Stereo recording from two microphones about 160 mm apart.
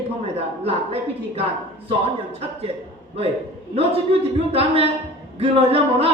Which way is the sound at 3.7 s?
40° right (ahead or behind).